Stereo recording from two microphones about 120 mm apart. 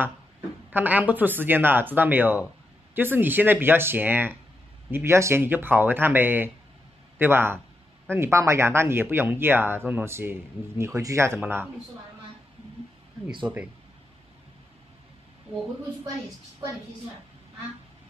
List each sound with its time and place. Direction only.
0.7 s speech: 15° right (ahead or behind)
13.5 s speech: 10° right (ahead or behind)